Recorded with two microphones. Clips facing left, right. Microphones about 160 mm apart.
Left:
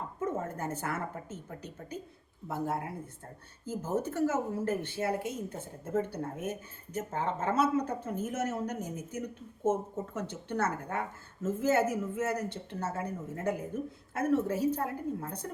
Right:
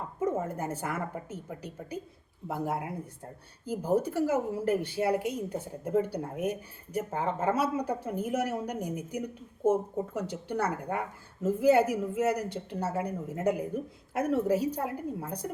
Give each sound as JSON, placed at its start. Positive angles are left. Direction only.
{"t": 0.3, "sound": "a woman's voice", "side_deg": -10}